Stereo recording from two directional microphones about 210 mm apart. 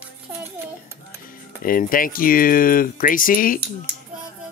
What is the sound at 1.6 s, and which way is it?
Speech, 40° left (ahead or behind).